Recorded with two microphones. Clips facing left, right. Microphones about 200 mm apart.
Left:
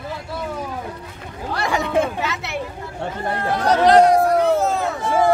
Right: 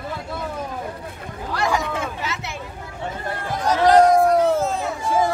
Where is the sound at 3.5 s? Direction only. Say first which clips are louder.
Left 2 dB; 65° left (ahead or behind).